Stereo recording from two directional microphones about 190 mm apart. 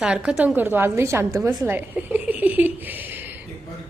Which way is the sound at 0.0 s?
5° right (ahead or behind).